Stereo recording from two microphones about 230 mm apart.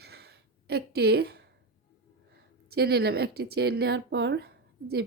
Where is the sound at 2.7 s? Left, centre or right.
Right.